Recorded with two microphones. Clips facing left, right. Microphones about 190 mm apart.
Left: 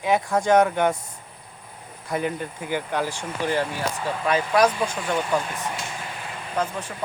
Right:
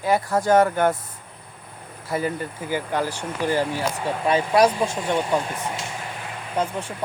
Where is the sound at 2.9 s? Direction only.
10° left (ahead or behind).